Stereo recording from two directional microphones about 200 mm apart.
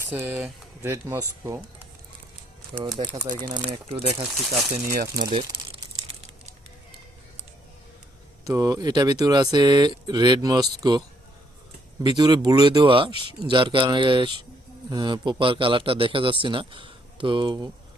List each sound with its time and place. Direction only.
0.1 s speech: 10° right (ahead or behind)
2.7 s a man's voice: 25° right (ahead or behind)
4.2 s speech: centre (ahead or behind)
5.1 s a man's voice: 20° right (ahead or behind)
8.4 s a man's voice: 15° right (ahead or behind)
12.0 s a man's voice: 20° right (ahead or behind)